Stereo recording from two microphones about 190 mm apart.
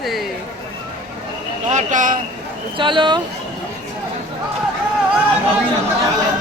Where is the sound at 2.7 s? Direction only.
25° right (ahead or behind).